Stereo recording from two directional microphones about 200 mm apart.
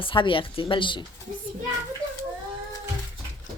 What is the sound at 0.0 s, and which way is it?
Speech, 25° left (ahead or behind).